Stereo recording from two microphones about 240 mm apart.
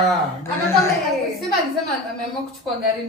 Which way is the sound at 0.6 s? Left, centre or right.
Centre.